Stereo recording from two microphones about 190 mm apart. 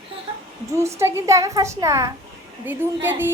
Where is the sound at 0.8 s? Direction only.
15° right (ahead or behind).